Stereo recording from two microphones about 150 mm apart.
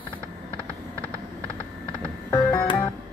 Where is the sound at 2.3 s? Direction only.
30° left (ahead or behind).